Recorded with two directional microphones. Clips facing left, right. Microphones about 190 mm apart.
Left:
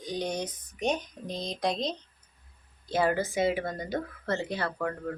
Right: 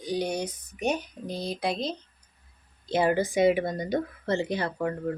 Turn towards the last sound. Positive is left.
turn(degrees=-15)  # may be behind; listen again after turning